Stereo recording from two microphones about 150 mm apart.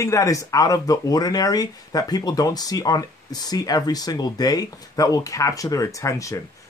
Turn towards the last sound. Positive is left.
turn(degrees=20)  # may be behind; listen again after turning